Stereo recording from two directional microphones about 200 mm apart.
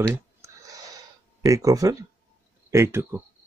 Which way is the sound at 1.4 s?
15° right (ahead or behind).